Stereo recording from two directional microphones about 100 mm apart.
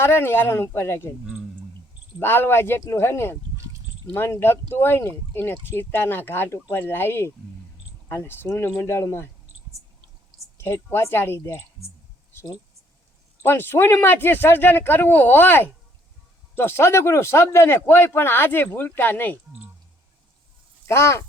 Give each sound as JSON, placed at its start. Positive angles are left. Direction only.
{"t": 0.0, "sound": "speech", "side_deg": 25}
{"t": 2.1, "sound": "speech", "side_deg": 25}
{"t": 10.6, "sound": "speech", "side_deg": 25}
{"t": 13.4, "sound": "speech", "side_deg": 20}
{"t": 20.8, "sound": "speech", "side_deg": 25}